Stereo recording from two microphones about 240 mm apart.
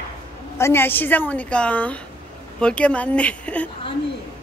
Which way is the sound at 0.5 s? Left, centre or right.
Centre.